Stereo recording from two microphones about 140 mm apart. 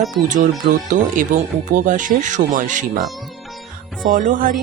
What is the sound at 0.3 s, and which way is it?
Speech, 60° right (ahead or behind).